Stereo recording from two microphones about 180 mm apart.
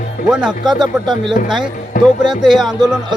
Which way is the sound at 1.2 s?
Centre (ahead or behind).